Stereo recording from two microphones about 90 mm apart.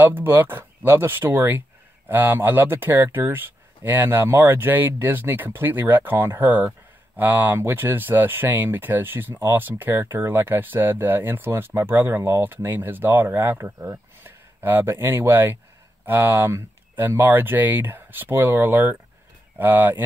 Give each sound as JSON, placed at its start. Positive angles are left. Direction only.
{"t": 0.0, "sound": "speech", "side_deg": -20}